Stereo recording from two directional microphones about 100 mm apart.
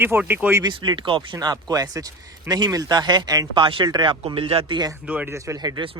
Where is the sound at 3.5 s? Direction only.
55° right (ahead or behind).